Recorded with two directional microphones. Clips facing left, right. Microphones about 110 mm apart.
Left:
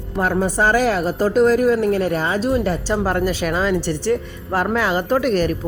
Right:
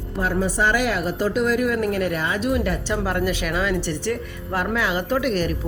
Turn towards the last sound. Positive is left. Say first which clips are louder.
# left 4 dB
turn(degrees=40)  # may be behind; listen again after turning